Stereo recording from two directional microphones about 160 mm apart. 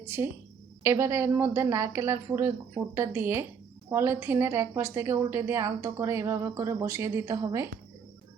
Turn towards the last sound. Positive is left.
turn(degrees=-20)  # may be behind; listen again after turning